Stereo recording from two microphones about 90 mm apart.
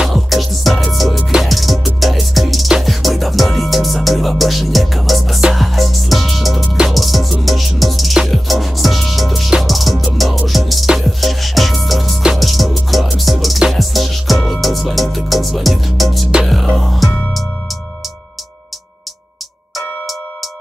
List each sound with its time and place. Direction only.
0.0 s music: centre (ahead or behind)